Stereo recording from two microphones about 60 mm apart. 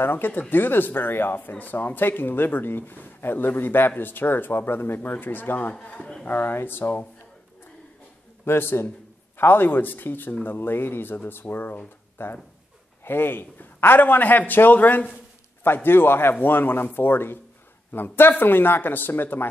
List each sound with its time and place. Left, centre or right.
0.0 s speech: left
5.8 s a man's voice: centre
6.2 s speech: left
8.5 s speech: left
15.6 s speech: left